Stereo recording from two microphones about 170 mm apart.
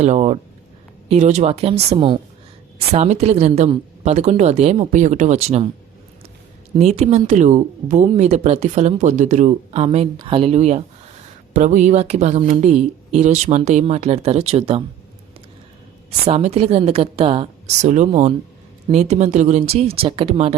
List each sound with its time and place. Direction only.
0.0 s speech: 40° right (ahead or behind)
6.7 s speech: 40° right (ahead or behind)
16.2 s speech: 40° right (ahead or behind)